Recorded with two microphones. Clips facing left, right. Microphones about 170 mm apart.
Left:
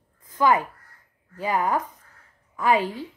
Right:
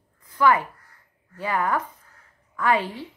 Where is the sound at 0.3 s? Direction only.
15° left (ahead or behind).